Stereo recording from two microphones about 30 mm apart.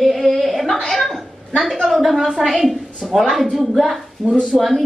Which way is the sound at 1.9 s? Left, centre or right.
Centre.